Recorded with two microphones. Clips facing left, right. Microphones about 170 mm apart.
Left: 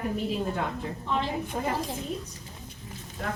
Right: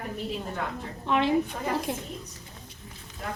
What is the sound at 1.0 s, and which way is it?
Speech, 70° right (ahead or behind).